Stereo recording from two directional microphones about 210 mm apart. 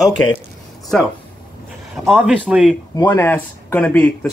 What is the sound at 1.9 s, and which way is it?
Speech, centre (ahead or behind).